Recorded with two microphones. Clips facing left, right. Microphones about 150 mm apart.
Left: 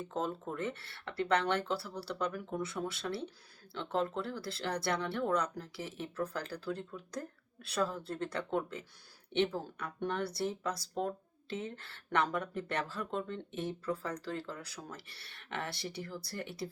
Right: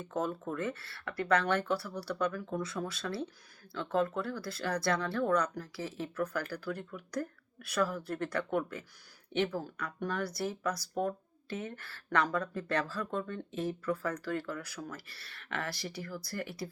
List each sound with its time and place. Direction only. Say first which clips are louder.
0.1 s speech: right 4 dB; 25° left (ahead or behind)